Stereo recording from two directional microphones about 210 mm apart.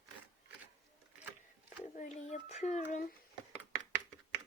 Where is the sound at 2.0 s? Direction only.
35° left (ahead or behind).